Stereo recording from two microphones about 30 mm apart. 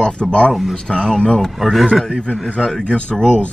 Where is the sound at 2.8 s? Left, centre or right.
Left.